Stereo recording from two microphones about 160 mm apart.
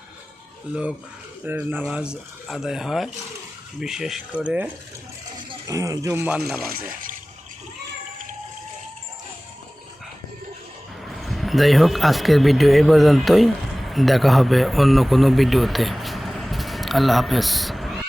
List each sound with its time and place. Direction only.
0.7 s speech: 5° right (ahead or behind)
5.6 s speech: 20° right (ahead or behind)
6.7 s speech: 60° right (ahead or behind)
11.0 s speech: centre (ahead or behind)